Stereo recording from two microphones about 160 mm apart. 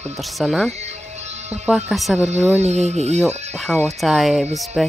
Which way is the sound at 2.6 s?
45° right (ahead or behind).